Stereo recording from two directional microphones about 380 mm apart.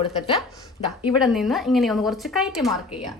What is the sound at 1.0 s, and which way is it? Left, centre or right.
Speech, centre.